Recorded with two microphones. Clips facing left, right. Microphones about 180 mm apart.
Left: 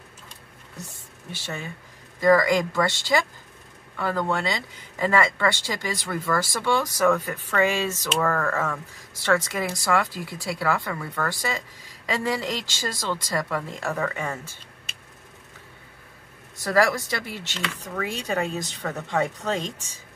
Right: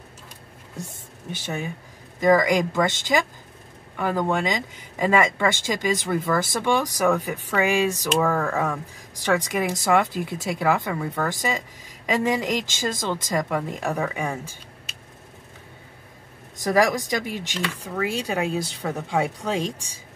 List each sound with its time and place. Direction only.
1.3 s speech: 15° right (ahead or behind)
16.6 s speech: 15° right (ahead or behind)